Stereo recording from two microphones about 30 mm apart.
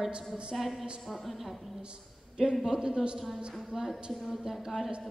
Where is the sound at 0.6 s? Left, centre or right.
Centre.